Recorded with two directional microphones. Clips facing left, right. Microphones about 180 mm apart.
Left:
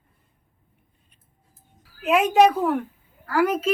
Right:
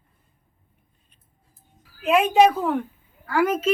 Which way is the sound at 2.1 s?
10° left (ahead or behind).